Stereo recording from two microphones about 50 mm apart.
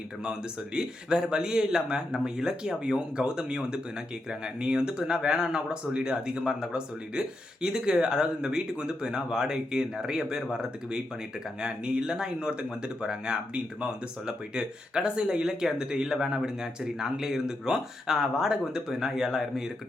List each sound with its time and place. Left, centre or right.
0.3 s speech: centre